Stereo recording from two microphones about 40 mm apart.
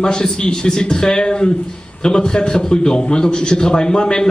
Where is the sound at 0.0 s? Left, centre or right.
Centre.